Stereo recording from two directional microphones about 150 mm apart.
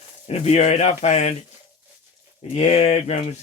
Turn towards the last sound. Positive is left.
turn(degrees=45)  # may be behind; listen again after turning